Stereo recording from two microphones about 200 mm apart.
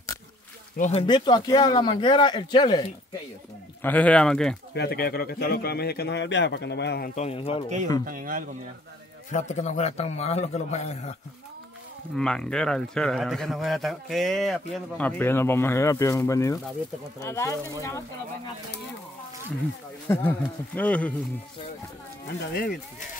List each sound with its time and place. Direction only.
0.7 s a man's voice: 35° left (ahead or behind)
1.0 s speech: 20° left (ahead or behind)
3.8 s a man's voice: 5° left (ahead or behind)
4.7 s a man's voice: 50° left (ahead or behind)
7.2 s speech: 30° left (ahead or behind)
8.0 s speech: 45° right (ahead or behind)
9.3 s a man's voice: 35° left (ahead or behind)
12.2 s a man's voice: 5° left (ahead or behind)
20.1 s speech: 10° left (ahead or behind)
22.5 s a man's voice: 45° left (ahead or behind)